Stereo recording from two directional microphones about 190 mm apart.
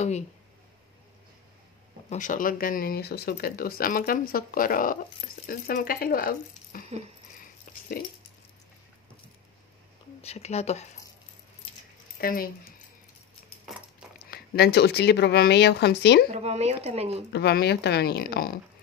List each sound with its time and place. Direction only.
2.0 s speech: 40° left (ahead or behind)
7.7 s a sound: 45° left (ahead or behind)
10.2 s speech: 35° left (ahead or behind)
12.2 s speech: 50° left (ahead or behind)
14.3 s a woman's voice: 55° left (ahead or behind)
16.3 s speech: 35° right (ahead or behind)
17.3 s a woman's voice: 60° left (ahead or behind)